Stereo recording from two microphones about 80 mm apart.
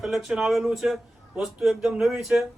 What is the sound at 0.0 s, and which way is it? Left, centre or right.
Speech, centre.